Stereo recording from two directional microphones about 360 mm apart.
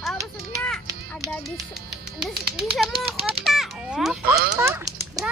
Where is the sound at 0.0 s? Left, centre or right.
Centre.